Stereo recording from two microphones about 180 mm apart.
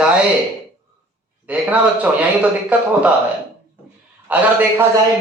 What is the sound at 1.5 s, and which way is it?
A man's voice, 10° right (ahead or behind).